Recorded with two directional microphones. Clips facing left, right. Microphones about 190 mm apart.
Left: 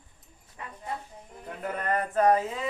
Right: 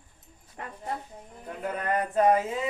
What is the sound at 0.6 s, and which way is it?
Speech, 60° right (ahead or behind).